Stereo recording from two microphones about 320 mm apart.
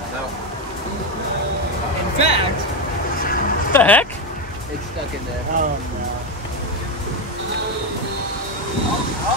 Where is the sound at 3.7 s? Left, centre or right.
Centre.